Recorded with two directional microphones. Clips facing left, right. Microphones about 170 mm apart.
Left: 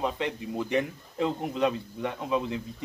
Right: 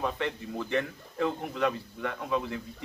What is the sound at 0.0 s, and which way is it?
Speech, 15° left (ahead or behind).